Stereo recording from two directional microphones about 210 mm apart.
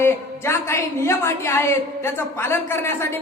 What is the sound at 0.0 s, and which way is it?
A woman's voice, 10° left (ahead or behind).